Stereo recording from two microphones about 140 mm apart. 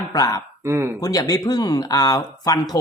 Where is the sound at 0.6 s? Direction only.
20° right (ahead or behind).